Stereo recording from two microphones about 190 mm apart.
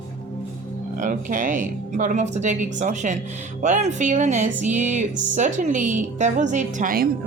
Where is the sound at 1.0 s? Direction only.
45° right (ahead or behind).